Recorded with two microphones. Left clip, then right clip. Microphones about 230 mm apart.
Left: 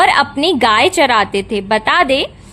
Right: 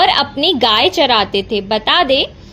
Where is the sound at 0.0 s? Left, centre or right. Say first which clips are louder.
Left 1 dB; centre.